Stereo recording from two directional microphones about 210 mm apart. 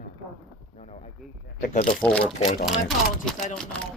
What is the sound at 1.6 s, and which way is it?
Speech, 40° left (ahead or behind).